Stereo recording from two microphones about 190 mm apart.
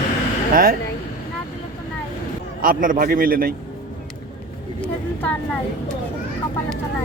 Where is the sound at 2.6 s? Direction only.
45° right (ahead or behind).